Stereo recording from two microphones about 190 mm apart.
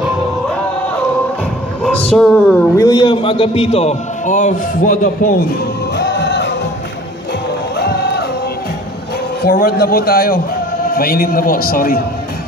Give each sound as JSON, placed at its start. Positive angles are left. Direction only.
{"t": 2.0, "sound": "a man's voice", "side_deg": 5}
{"t": 5.9, "sound": "music", "side_deg": 65}
{"t": 7.7, "sound": "music", "side_deg": 60}
{"t": 9.4, "sound": "a man's voice", "side_deg": 50}